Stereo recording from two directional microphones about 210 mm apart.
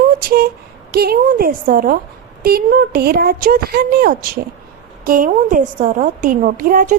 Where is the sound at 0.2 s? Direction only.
45° right (ahead or behind).